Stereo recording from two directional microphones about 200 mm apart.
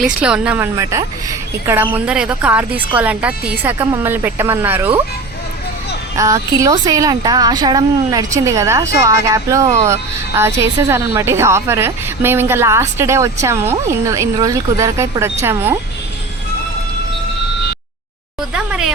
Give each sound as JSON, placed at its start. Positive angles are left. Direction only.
{"t": 0.0, "sound": "speech", "side_deg": -5}
{"t": 6.1, "sound": "speech", "side_deg": -15}
{"t": 18.5, "sound": "a sound", "side_deg": -5}